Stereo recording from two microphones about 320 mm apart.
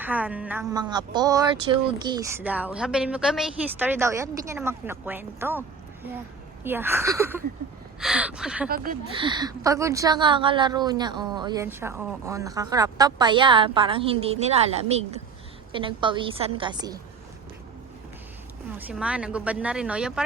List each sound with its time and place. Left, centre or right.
0.0 s speech: centre
6.7 s speech: centre
8.7 s speech: right
9.1 s speech: centre
15.7 s speech: centre
18.8 s speech: centre